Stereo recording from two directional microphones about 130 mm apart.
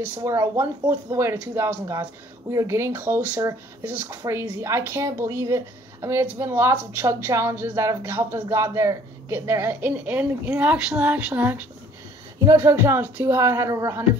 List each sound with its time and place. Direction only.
0.0 s speech: 25° right (ahead or behind)